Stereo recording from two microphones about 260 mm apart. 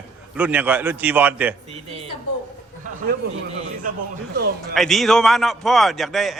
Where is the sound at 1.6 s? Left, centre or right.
Right.